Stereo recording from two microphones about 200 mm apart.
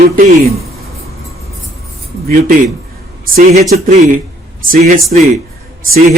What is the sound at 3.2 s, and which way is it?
A man's voice, 40° right (ahead or behind).